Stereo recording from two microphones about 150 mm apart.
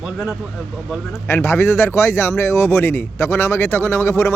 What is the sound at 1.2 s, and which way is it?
Speech, 15° left (ahead or behind).